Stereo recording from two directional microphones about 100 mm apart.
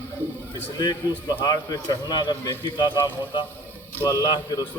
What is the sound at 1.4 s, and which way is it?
A man's voice, 40° left (ahead or behind).